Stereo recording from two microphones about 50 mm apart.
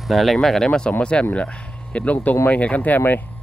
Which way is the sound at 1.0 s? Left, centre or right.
Left.